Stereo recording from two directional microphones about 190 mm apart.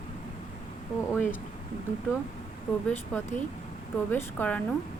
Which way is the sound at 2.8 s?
5° left (ahead or behind).